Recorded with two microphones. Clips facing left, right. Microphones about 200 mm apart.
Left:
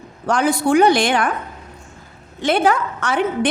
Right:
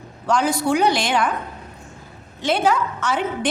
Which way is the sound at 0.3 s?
55° left (ahead or behind).